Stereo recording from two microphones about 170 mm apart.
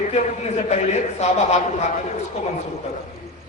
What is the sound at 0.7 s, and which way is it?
Speech, 40° left (ahead or behind).